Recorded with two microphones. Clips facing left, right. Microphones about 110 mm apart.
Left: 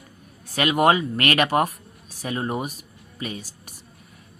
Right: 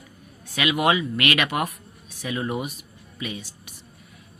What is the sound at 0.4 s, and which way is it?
Speech, 40° left (ahead or behind).